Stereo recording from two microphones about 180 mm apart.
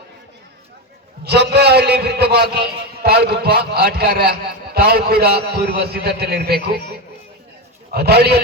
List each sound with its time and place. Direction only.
1.2 s a man's voice: 65° right (ahead or behind)
7.9 s a man's voice: 60° right (ahead or behind)